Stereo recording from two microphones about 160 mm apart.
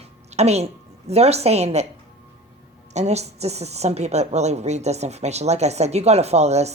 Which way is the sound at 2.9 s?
45° right (ahead or behind).